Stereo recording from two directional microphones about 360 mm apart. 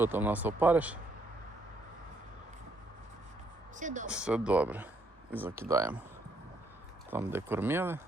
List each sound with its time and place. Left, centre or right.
0.0 s speech: centre
3.8 s speech: right
4.1 s speech: centre
7.1 s speech: centre